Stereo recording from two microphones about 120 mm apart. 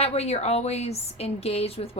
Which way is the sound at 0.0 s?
60° left (ahead or behind).